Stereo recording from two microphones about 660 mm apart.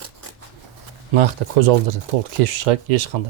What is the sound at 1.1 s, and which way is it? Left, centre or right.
Speech, right.